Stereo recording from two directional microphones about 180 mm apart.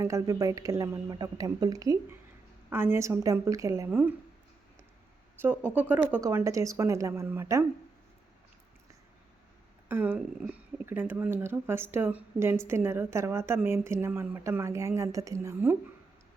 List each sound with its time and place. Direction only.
0.0 s speech: 20° right (ahead or behind)
5.4 s speech: 10° right (ahead or behind)
9.9 s speech: 10° right (ahead or behind)